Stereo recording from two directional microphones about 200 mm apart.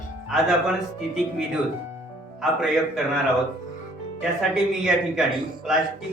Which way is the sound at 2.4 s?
Centre (ahead or behind).